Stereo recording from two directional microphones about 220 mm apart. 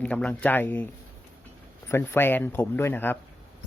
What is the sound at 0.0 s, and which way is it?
Speech, 5° left (ahead or behind).